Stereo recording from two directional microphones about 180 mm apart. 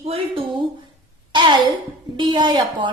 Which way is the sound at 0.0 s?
30° right (ahead or behind).